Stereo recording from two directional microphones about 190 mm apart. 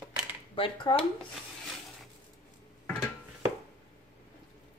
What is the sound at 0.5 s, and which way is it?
Speech, 25° left (ahead or behind).